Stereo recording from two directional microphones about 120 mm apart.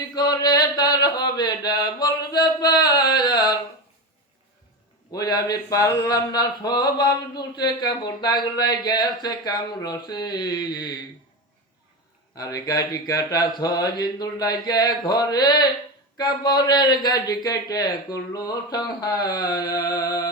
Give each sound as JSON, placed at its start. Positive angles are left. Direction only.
{"t": 0.1, "sound": "a sound", "side_deg": 35}
{"t": 5.1, "sound": "mantra", "side_deg": 35}
{"t": 12.4, "sound": "mantra", "side_deg": 30}